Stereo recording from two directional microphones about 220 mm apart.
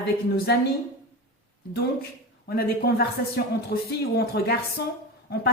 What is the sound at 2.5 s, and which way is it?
A woman's voice, 45° left (ahead or behind).